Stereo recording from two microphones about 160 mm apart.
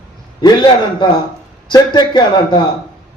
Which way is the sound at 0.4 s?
25° left (ahead or behind).